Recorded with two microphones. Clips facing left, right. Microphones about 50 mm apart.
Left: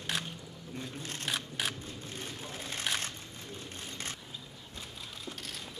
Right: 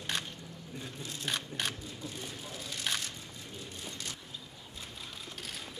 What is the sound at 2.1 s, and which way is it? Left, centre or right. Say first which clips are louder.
Vehicle: left 1 dB; left.